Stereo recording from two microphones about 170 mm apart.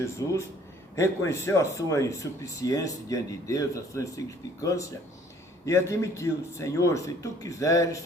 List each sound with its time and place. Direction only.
0.9 s speech: 15° left (ahead or behind)